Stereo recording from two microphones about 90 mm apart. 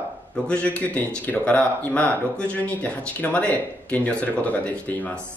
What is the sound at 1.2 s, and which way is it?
Speech, 15° left (ahead or behind).